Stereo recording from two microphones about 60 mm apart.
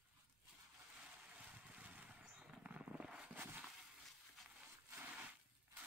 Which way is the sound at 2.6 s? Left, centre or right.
Right.